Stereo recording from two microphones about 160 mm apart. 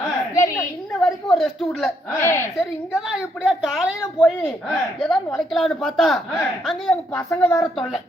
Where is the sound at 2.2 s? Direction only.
15° left (ahead or behind).